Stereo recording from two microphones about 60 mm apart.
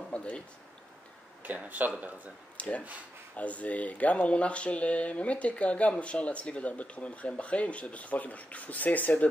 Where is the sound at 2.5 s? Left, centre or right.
Left.